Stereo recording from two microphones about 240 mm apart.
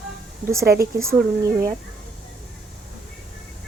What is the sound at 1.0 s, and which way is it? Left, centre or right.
Speech, centre.